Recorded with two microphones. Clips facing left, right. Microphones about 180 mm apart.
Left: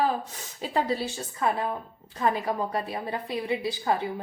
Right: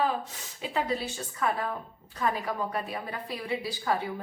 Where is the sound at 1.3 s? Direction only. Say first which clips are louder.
Left 3 dB; 25° left (ahead or behind).